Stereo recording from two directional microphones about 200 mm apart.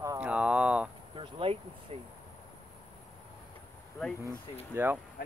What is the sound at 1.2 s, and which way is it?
Speech, 30° right (ahead or behind).